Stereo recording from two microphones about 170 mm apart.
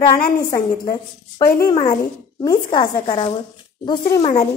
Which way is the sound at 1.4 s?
60° left (ahead or behind).